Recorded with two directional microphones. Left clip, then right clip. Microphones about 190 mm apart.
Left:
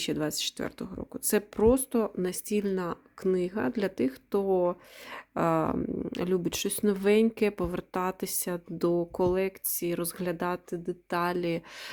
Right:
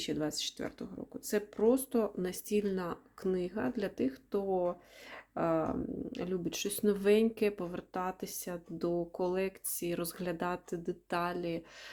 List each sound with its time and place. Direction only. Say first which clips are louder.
0.0 s speech: left 5 dB; 40° left (ahead or behind)